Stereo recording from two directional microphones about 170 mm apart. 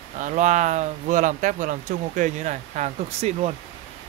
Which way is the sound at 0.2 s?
45° right (ahead or behind).